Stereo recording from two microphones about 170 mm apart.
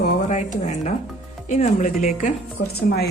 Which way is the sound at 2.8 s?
65° left (ahead or behind).